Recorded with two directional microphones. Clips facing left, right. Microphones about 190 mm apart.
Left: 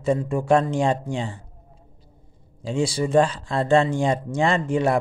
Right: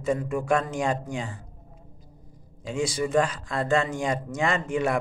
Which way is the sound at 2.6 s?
30° left (ahead or behind).